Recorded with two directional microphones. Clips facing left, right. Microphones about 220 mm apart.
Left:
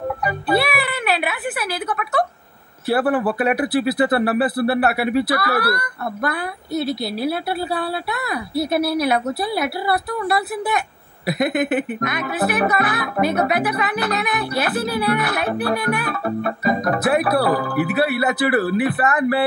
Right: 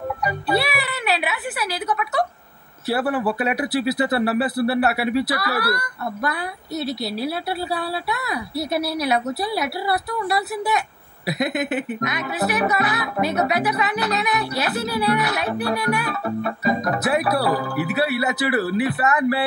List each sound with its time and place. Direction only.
0.2 s speech: 55° left (ahead or behind)